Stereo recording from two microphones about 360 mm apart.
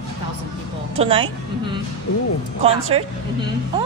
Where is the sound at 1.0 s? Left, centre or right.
Centre.